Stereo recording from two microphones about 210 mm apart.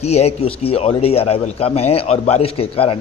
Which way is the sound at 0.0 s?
30° left (ahead or behind).